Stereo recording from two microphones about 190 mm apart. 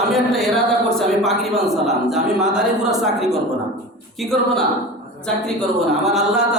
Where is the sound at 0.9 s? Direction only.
Centre (ahead or behind).